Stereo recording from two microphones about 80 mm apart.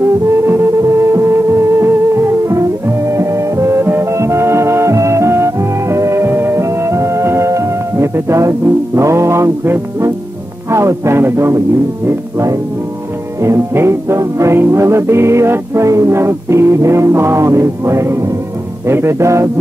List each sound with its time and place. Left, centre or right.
0.5 s music: right
10.7 s speech: right
13.4 s music: right